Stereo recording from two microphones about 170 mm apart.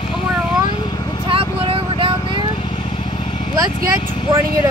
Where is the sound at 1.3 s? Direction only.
35° right (ahead or behind).